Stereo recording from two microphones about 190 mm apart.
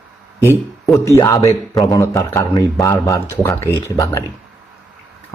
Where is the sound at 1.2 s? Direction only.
15° left (ahead or behind).